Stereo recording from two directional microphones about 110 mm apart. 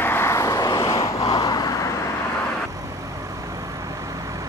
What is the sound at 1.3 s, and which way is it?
Vehicle, 40° left (ahead or behind).